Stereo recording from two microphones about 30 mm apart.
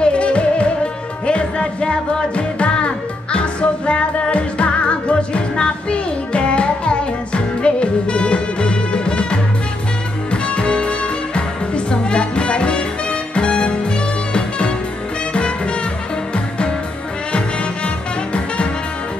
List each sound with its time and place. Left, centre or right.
0.0 s music: left
15.3 s music: left
17.8 s music: left